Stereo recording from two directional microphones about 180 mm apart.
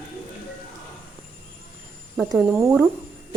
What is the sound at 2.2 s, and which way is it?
Speech, 5° right (ahead or behind).